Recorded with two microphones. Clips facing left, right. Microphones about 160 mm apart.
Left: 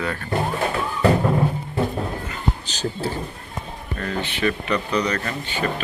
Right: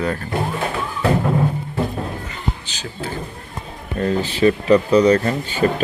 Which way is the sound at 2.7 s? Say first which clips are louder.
Left 4 dB; 35° left (ahead or behind).